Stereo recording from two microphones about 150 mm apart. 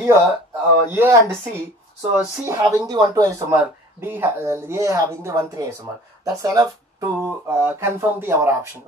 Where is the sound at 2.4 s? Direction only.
20° right (ahead or behind).